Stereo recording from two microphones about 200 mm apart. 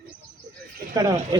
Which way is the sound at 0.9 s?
20° right (ahead or behind).